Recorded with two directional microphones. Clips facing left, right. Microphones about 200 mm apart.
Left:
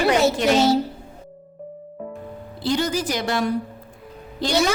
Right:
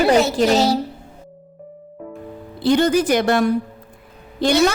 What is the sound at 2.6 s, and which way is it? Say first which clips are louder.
A woman's voice: right 7 dB; 55° right (ahead or behind).